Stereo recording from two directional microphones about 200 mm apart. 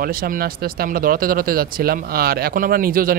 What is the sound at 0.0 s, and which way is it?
Speech, 45° right (ahead or behind).